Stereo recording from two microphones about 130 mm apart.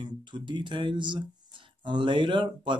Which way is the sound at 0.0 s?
35° right (ahead or behind).